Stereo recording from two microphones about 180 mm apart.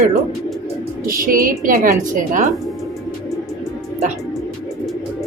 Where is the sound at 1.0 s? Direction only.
50° right (ahead or behind).